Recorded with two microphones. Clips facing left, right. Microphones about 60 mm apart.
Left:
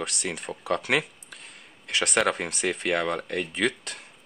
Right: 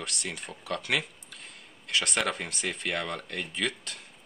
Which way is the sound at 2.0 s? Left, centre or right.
Left.